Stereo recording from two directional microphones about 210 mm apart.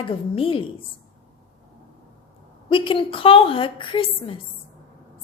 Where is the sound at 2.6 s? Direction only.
25° left (ahead or behind).